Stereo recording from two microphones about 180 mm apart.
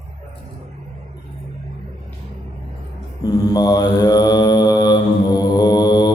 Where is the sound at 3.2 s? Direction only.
20° left (ahead or behind).